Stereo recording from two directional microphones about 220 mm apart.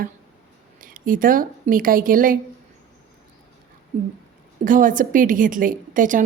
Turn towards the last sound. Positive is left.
turn(degrees=-35)  # may be behind; listen again after turning